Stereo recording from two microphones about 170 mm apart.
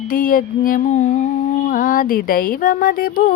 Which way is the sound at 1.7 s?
55° left (ahead or behind).